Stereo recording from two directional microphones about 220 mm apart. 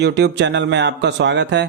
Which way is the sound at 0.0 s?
50° right (ahead or behind).